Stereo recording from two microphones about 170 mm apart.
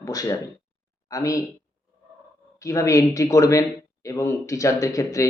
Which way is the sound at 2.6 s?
20° left (ahead or behind).